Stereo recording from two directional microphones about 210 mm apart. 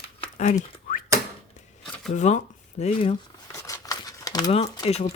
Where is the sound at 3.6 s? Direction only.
15° left (ahead or behind).